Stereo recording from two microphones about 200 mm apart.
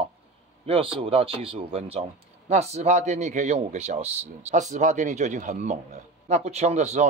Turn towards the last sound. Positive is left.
turn(degrees=-35)  # may be behind; listen again after turning